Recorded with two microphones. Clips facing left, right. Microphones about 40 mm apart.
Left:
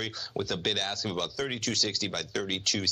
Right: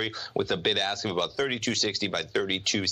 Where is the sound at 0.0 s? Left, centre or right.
Centre.